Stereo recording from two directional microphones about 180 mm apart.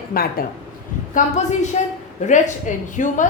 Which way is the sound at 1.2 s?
40° left (ahead or behind).